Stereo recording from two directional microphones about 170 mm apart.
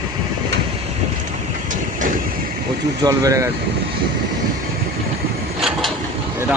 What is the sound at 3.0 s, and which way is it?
Speech, 20° right (ahead or behind).